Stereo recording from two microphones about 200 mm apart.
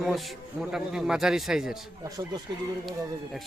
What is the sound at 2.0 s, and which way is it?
Speech, 20° right (ahead or behind).